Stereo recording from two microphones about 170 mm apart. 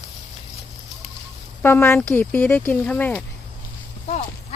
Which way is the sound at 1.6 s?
10° left (ahead or behind).